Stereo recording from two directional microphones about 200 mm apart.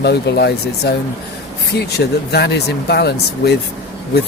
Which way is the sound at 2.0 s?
55° left (ahead or behind).